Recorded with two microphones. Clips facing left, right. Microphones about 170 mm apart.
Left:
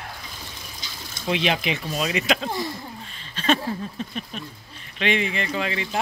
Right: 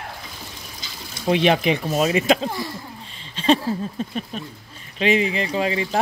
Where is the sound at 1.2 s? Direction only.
45° right (ahead or behind).